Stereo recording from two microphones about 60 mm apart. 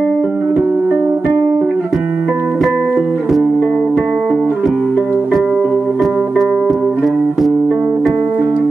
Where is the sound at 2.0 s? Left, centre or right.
Right.